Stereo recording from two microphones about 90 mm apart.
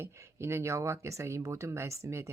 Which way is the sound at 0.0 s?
30° right (ahead or behind).